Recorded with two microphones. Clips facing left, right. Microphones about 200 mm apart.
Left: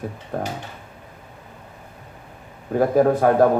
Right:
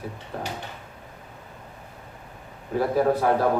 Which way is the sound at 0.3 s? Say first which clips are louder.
Left 6 dB; 50° left (ahead or behind).